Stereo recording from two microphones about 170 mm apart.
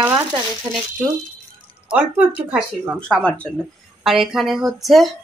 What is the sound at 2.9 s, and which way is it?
Speech, 5° left (ahead or behind).